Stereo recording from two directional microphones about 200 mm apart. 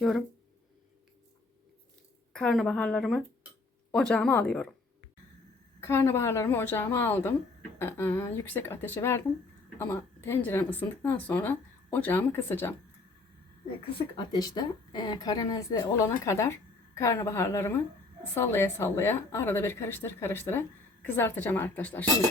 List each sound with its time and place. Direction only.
2.3 s speech: centre (ahead or behind)
5.8 s a woman's voice: 15° left (ahead or behind)
14.2 s a woman's voice: 20° left (ahead or behind)